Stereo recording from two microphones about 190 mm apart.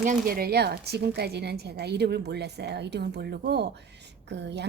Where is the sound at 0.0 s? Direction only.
45° right (ahead or behind).